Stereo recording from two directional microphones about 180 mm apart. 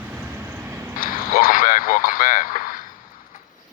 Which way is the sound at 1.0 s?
55° left (ahead or behind).